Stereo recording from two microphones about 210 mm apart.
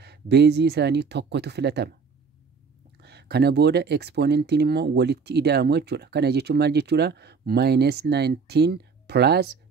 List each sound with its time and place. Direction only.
0.0 s speech: 50° right (ahead or behind)
3.0 s speech: 50° right (ahead or behind)